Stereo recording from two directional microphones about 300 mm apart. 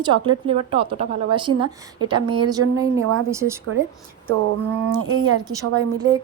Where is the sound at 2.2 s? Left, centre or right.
Right.